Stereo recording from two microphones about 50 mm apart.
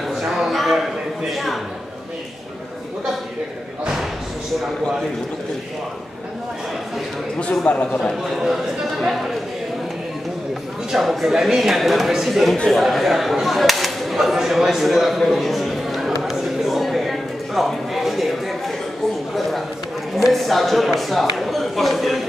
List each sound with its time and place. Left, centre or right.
0.1 s a sound: centre
7.6 s a man's voice: left
9.0 s speech: centre
10.9 s speech: centre
12.6 s a sound: centre
20.2 s speech: centre